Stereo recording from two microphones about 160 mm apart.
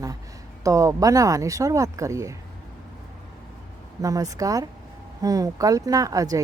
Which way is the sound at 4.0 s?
20° right (ahead or behind).